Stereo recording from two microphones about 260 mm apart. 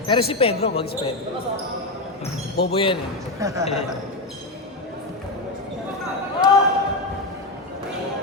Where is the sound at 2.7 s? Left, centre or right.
Left.